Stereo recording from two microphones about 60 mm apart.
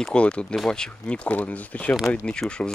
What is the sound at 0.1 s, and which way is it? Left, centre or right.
Speech, centre.